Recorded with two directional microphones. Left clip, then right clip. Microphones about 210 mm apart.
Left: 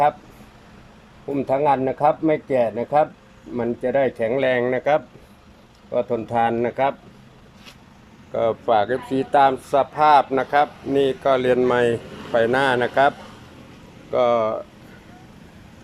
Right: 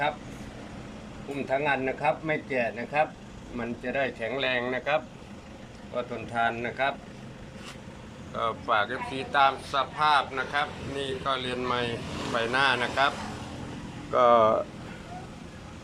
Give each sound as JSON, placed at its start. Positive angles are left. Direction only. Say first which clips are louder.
{"t": 1.5, "sound": "speech", "louder": "left 8 dB", "side_deg": 35}
{"t": 8.3, "sound": "speech", "louder": "left 8 dB", "side_deg": 30}
{"t": 14.1, "sound": "speech", "louder": "left 1 dB", "side_deg": 15}